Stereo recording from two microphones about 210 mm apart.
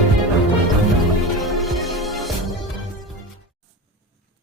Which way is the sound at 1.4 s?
Centre (ahead or behind).